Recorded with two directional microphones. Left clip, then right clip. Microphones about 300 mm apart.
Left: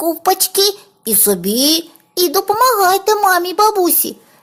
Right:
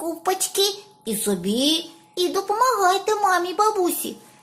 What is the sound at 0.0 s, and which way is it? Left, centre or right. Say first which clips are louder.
A child's voice: left 9 dB; left.